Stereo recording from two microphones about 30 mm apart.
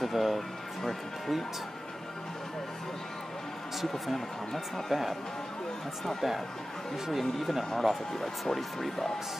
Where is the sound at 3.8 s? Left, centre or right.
Centre.